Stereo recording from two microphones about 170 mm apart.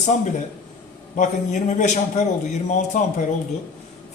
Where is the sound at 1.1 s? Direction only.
45° left (ahead or behind).